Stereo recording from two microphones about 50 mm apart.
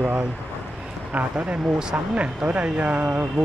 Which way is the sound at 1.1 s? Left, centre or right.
Right.